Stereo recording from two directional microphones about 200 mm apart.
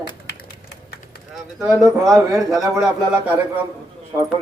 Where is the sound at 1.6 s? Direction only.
15° right (ahead or behind).